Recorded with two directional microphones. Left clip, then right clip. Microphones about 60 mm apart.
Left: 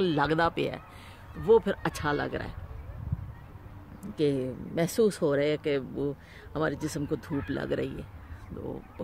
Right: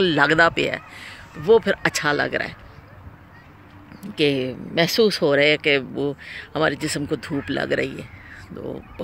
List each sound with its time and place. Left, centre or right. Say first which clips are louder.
0.0 s speech: right 10 dB; right
1.4 s speech: right 6 dB; right
2.0 s speech: right 7 dB; right
4.1 s speech: right 8 dB; right
7.4 s speech: right 11 dB; right